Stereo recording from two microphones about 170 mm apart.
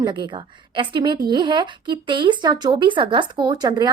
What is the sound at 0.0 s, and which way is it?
Speech, 25° right (ahead or behind).